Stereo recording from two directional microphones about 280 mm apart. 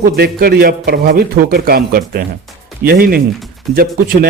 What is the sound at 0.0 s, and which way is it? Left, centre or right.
A man's voice, right.